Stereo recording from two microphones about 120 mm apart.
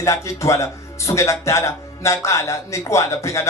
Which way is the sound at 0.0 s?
25° left (ahead or behind).